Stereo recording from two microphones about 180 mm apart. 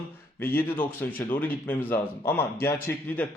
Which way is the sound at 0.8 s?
10° left (ahead or behind).